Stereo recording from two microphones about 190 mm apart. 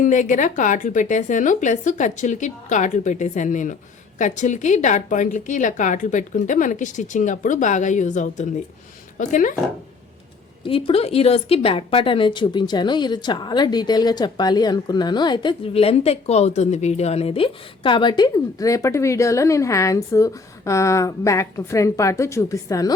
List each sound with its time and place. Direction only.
0.0 s a woman's voice: 40° left (ahead or behind)
10.6 s a woman's voice: 30° left (ahead or behind)